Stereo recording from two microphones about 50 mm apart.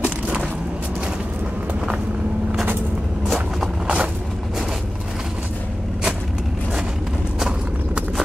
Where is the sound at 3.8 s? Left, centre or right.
Right.